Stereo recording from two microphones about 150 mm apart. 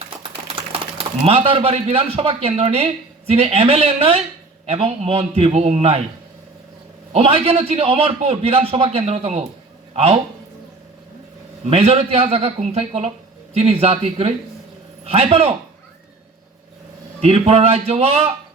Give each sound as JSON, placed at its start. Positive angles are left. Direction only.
{"t": 1.2, "sound": "speech", "side_deg": -40}
{"t": 7.1, "sound": "speech", "side_deg": -40}
{"t": 11.7, "sound": "speech", "side_deg": -45}
{"t": 17.2, "sound": "speech", "side_deg": -45}